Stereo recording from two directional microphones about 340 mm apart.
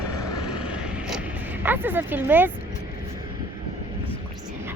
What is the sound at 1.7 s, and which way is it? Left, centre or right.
Speech, centre.